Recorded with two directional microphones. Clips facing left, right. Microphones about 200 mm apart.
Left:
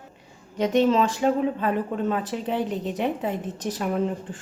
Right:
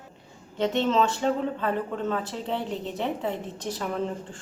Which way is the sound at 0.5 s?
15° left (ahead or behind).